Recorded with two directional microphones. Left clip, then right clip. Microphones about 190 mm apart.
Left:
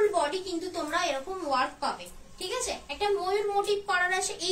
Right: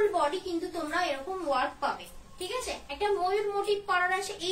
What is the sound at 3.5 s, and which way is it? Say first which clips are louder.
A woman's voice: left 1 dB; 20° left (ahead or behind).